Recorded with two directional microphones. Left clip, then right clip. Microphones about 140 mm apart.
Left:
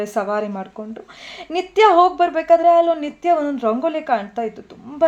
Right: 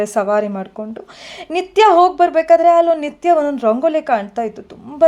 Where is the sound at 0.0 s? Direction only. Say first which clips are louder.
Right 5 dB; 40° right (ahead or behind).